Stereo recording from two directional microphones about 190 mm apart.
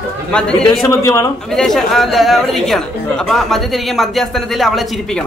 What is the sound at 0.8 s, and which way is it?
Speech, 15° left (ahead or behind).